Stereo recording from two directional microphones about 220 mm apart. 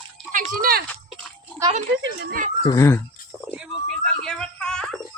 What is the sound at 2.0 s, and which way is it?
Speech, 55° right (ahead or behind).